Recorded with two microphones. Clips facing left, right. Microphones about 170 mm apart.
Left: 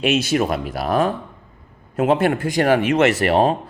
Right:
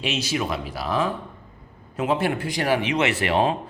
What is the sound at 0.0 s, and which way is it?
A man's voice, 55° left (ahead or behind).